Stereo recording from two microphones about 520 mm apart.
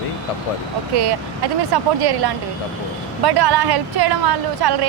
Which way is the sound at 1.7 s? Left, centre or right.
Right.